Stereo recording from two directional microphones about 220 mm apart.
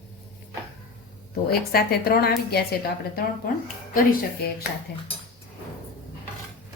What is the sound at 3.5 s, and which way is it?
Speech, 40° left (ahead or behind).